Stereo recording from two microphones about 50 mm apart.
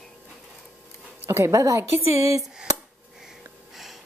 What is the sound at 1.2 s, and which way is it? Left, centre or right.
Speech, right.